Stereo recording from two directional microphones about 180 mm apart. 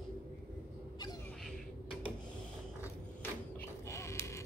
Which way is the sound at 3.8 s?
15° left (ahead or behind).